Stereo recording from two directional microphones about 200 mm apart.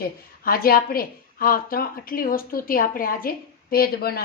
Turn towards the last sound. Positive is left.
turn(degrees=50)  # may be behind; listen again after turning